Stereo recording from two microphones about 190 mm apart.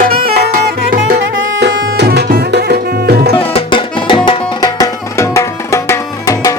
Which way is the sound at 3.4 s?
30° left (ahead or behind).